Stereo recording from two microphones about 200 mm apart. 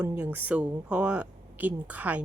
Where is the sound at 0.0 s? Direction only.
10° right (ahead or behind).